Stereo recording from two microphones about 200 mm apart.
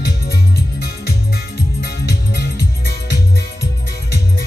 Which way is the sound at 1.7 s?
55° left (ahead or behind).